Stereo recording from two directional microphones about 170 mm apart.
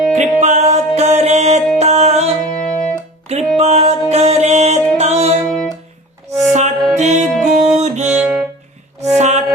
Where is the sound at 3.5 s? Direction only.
40° right (ahead or behind).